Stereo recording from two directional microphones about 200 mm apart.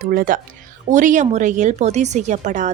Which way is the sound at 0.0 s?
45° right (ahead or behind).